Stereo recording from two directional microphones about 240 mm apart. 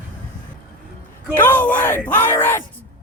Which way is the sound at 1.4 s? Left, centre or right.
Centre.